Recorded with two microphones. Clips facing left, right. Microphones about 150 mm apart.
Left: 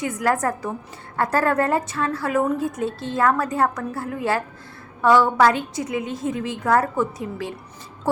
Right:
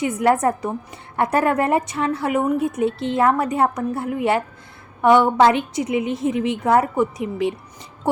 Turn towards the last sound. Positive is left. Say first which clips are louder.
# right 6 dB
turn(degrees=-20)  # may be behind; listen again after turning